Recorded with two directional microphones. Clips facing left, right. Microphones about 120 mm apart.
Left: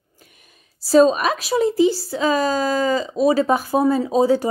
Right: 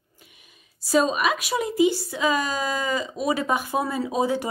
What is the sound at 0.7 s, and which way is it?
Speech, 35° left (ahead or behind).